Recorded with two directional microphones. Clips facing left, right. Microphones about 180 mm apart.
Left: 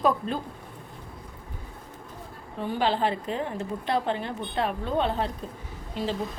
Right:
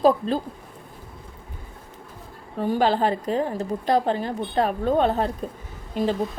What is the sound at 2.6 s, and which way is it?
A woman's voice, 45° right (ahead or behind).